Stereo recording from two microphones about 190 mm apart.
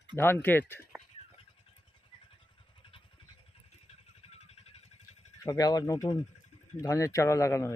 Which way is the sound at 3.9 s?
35° left (ahead or behind).